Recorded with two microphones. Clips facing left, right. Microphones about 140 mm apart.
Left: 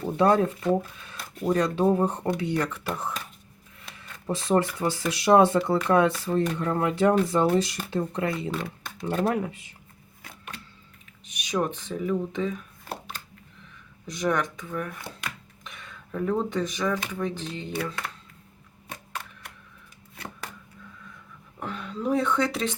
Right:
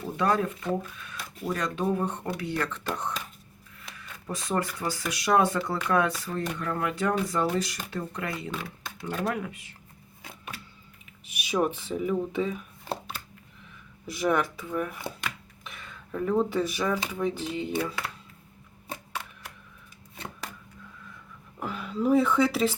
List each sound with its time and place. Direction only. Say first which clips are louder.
0.0 s speech: left 5 dB; 30° left (ahead or behind); by 3.2 s 5° left (ahead or behind)
3.9 s speech: left 6 dB; 25° left (ahead or behind)
11.3 s speech: right 1 dB; 5° right (ahead or behind)
14.1 s speech: right 1 dB; 5° right (ahead or behind)
15.2 s a sound: right 1 dB; centre (ahead or behind)
17.1 s speech: right 1 dB; 10° right (ahead or behind)
21.6 s speech: right 2 dB; 5° right (ahead or behind)